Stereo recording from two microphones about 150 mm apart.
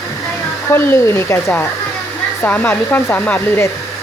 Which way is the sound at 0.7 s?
15° left (ahead or behind).